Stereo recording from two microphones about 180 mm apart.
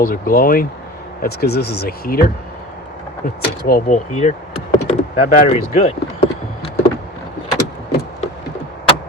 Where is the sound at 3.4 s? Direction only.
60° left (ahead or behind).